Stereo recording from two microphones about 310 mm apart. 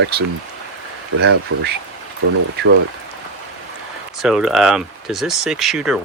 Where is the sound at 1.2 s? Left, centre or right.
Right.